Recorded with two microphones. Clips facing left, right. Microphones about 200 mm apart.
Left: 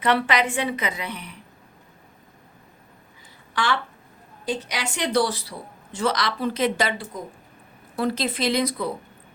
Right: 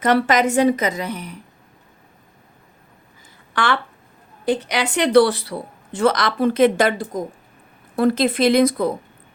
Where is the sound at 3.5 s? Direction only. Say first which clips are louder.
Right 4 dB; 60° right (ahead or behind).